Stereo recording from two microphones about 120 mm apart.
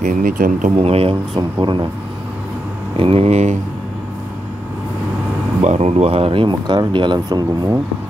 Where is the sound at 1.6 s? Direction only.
40° right (ahead or behind).